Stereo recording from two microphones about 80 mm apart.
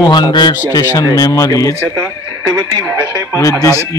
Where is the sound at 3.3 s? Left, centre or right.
Left.